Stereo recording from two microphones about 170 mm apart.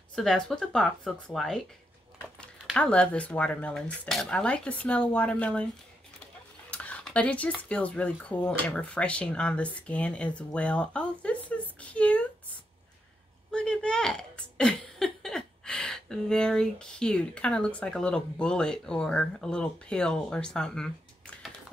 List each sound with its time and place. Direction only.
0.1 s speech: 5° left (ahead or behind)
2.6 s speech: 5° left (ahead or behind)
6.7 s speech: 5° left (ahead or behind)
11.8 s a sound: 10° left (ahead or behind)
13.5 s speech: 5° left (ahead or behind)